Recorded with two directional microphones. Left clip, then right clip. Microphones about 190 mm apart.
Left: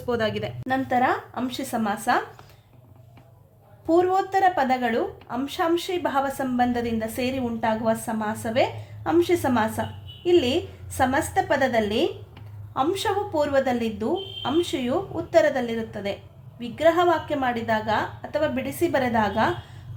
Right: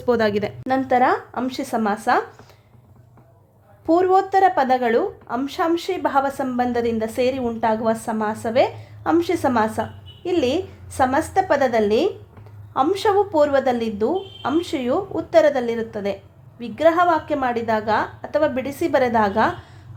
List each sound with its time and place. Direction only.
0.0 s a woman's voice: 45° right (ahead or behind)
3.8 s a woman's voice: 45° right (ahead or behind)